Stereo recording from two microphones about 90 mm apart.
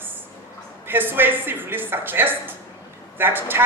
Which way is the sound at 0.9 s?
20° right (ahead or behind).